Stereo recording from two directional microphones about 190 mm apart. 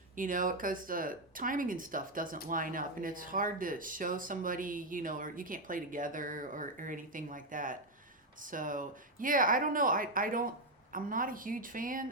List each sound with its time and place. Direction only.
0.2 s speech: 45° right (ahead or behind)